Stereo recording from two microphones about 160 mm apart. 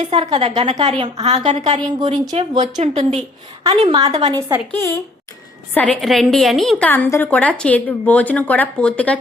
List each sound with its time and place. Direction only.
0.0 s a woman's voice: 35° right (ahead or behind)
2.0 s speech: 25° right (ahead or behind)
2.3 s a woman's voice: 45° right (ahead or behind)
4.3 s speech: 20° right (ahead or behind)
4.7 s a woman's voice: 15° left (ahead or behind)